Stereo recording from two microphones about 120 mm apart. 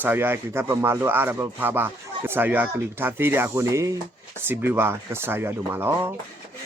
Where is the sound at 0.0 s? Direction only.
15° right (ahead or behind).